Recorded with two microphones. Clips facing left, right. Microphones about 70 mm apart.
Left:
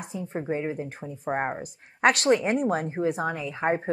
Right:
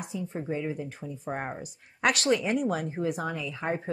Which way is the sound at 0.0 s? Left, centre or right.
Left.